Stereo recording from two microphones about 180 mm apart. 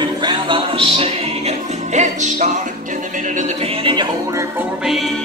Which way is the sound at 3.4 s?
35° right (ahead or behind).